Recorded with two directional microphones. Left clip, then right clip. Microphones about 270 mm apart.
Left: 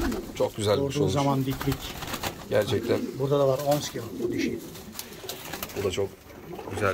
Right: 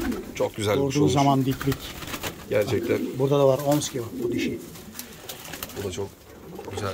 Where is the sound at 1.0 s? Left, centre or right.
Right.